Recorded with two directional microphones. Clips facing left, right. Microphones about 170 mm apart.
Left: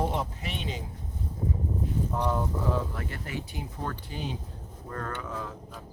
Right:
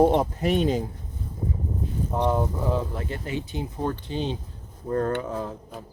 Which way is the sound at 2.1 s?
20° right (ahead or behind).